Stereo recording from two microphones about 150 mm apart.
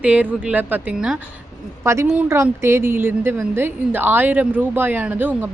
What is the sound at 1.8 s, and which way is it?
A woman's voice, 20° right (ahead or behind).